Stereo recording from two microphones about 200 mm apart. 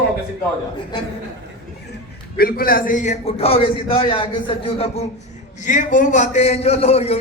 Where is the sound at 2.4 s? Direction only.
50° left (ahead or behind).